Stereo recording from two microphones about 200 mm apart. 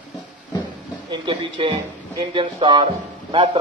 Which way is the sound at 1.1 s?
25° right (ahead or behind).